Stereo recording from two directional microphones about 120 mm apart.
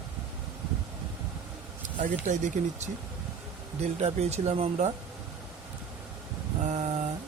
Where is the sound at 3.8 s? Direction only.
65° right (ahead or behind).